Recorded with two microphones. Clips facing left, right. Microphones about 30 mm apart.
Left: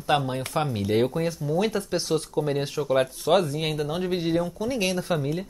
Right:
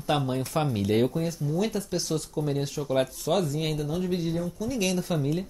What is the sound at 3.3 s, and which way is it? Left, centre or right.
Speech, left.